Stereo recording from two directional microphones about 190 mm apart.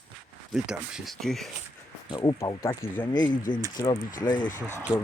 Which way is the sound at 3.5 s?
25° left (ahead or behind).